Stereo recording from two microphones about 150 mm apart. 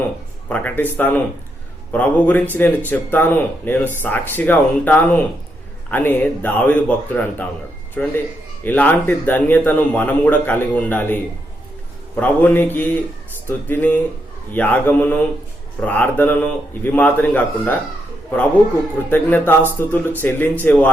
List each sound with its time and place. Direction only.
0.4 s speech: 10° left (ahead or behind)
19.1 s speech: 15° left (ahead or behind)